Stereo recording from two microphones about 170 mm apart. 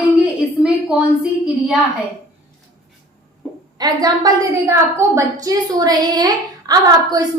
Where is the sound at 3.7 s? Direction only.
25° right (ahead or behind).